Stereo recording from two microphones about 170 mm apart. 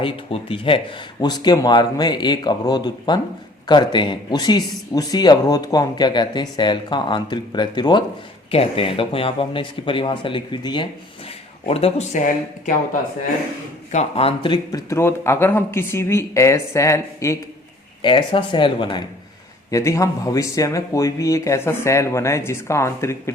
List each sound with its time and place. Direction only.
0.0 s speech: 35° left (ahead or behind)
13.9 s speech: 35° left (ahead or behind); by 17.3 s 15° left (ahead or behind)
18.0 s speech: 30° left (ahead or behind)
19.7 s speech: 20° left (ahead or behind)